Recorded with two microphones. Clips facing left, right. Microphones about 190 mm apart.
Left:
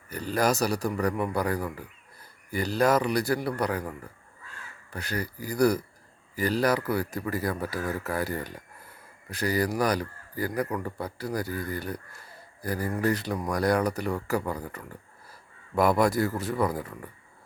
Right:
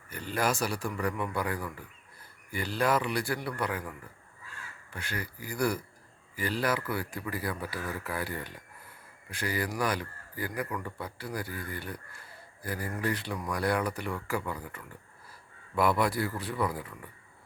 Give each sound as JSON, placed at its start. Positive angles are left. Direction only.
{"t": 0.1, "sound": "a man's voice", "side_deg": 40}